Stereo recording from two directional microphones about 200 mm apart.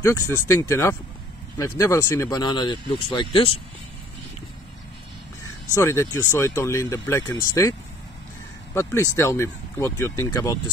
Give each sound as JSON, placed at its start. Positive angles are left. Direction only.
{"t": 0.0, "sound": "speech", "side_deg": 15}
{"t": 5.8, "sound": "speech", "side_deg": 15}
{"t": 8.7, "sound": "speech", "side_deg": 15}